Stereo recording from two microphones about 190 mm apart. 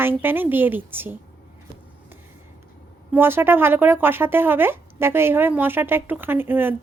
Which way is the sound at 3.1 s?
10° right (ahead or behind).